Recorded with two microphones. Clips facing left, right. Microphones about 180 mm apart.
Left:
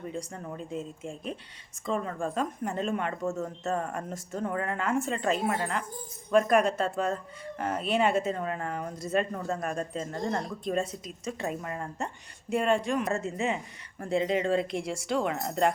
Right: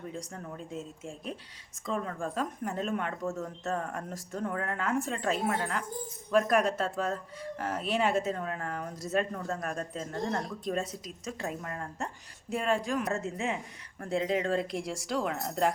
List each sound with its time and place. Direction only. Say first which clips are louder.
0.1 s speech: left 3 dB; centre (ahead or behind)